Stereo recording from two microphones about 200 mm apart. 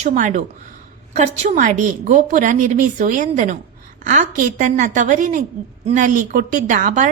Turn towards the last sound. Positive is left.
turn(degrees=-40)  # may be behind; listen again after turning